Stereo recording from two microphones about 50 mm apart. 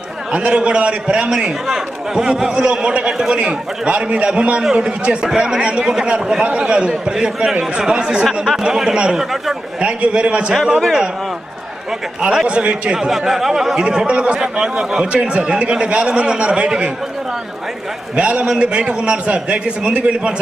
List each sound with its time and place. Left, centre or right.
0.3 s a man's voice: right
3.1 s speech: centre
3.3 s a man's voice: right
10.5 s a man's voice: centre
12.2 s a man's voice: centre
13.0 s a man's voice: centre
18.2 s a man's voice: right